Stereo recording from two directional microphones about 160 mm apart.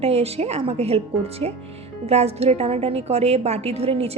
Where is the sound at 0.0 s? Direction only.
40° right (ahead or behind).